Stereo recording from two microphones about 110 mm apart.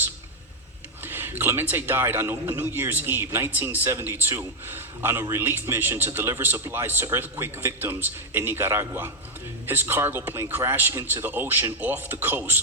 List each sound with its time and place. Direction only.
1.0 s a man's voice: 20° right (ahead or behind)